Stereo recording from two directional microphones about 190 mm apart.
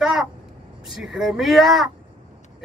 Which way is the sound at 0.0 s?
Centre (ahead or behind).